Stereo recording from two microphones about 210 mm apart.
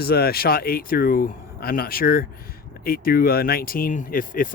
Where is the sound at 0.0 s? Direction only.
45° left (ahead or behind).